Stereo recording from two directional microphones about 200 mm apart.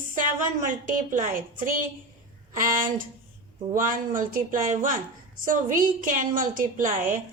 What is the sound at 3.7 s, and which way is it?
A woman's voice, 40° right (ahead or behind).